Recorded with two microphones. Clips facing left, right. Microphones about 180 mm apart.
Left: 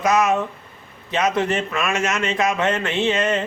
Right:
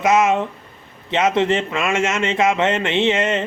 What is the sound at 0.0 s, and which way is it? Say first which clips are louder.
A man's voice: right 2 dB; 25° right (ahead or behind).